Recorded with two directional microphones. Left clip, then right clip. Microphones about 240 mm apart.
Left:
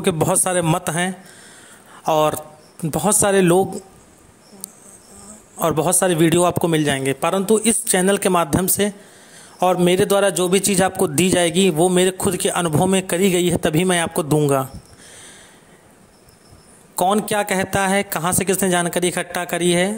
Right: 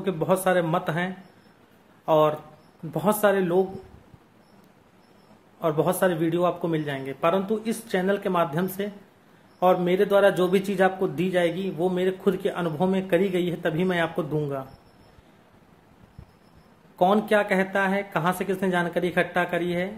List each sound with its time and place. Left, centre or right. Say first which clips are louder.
0.0 s a man's voice: left 4 dB; left
5.6 s a man's voice: left 4 dB; left
16.9 s a man's voice: left 2 dB; left